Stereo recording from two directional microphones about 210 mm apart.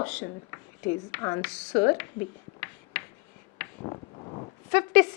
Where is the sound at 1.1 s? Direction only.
15° left (ahead or behind).